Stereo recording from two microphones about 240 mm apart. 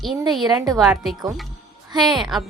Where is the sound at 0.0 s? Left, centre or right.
Centre.